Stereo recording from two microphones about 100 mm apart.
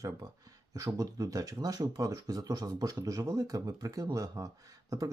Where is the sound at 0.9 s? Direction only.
40° right (ahead or behind).